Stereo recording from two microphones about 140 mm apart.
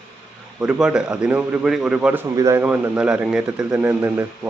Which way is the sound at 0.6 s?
10° right (ahead or behind).